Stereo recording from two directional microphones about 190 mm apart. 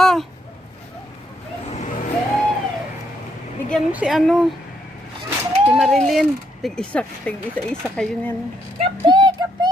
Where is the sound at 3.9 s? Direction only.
5° right (ahead or behind).